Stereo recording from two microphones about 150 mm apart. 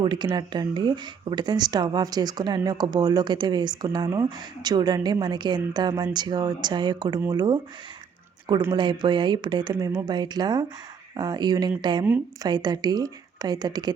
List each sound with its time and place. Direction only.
0.0 s speech: 30° right (ahead or behind)
8.7 s speech: 30° right (ahead or behind)